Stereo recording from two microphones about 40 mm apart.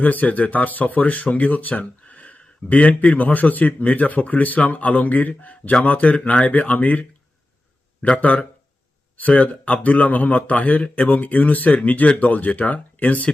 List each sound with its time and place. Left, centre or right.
0.0 s speech: left
8.1 s speech: left